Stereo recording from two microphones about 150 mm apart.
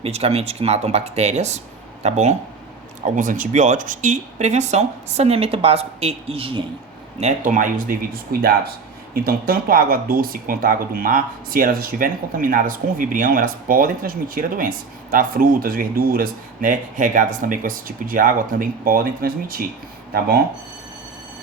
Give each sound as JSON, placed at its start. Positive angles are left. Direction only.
{"t": 0.0, "sound": "speech", "side_deg": -45}
{"t": 3.2, "sound": "speech", "side_deg": -60}
{"t": 7.2, "sound": "speech", "side_deg": -55}
{"t": 9.1, "sound": "speech", "side_deg": -75}